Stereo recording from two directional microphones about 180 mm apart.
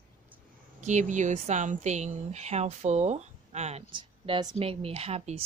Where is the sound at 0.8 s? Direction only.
40° right (ahead or behind).